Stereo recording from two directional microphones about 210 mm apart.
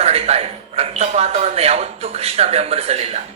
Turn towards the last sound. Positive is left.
turn(degrees=-30)  # may be behind; listen again after turning